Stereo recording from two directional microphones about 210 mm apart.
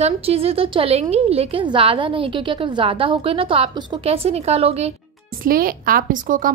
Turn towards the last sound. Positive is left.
turn(degrees=-40)  # may be behind; listen again after turning